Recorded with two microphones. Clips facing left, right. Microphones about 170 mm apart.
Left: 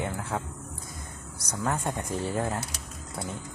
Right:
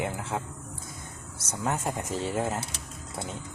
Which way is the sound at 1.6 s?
5° right (ahead or behind).